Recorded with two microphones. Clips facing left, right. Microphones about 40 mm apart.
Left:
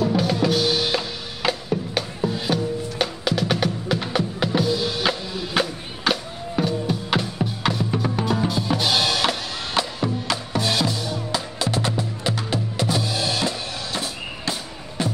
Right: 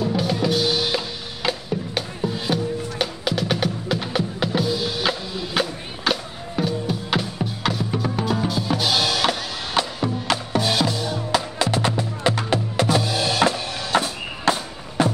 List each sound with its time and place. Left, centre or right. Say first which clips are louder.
0.0 s music: left 1 dB; centre
9.3 s music: right 1 dB; centre
10.2 s music: right 3 dB; right
10.6 s music: left 1 dB; centre
10.9 s music: right 2 dB; right
11.3 s music: right 4 dB; right